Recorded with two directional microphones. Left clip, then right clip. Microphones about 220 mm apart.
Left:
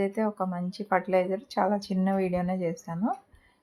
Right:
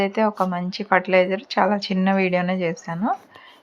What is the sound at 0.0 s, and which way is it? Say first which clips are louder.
A woman's voice: right 8 dB; 10° right (ahead or behind).